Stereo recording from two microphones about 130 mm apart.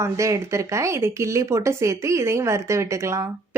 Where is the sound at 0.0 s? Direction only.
25° right (ahead or behind).